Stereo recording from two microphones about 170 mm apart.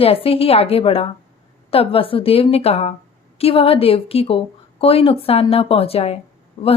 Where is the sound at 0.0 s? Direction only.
35° left (ahead or behind).